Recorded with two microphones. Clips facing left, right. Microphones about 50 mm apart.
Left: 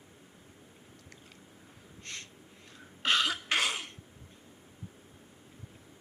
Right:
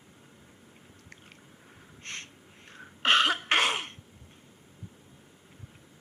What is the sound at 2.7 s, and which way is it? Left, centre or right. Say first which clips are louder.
Throat clearing: right 5 dB; right.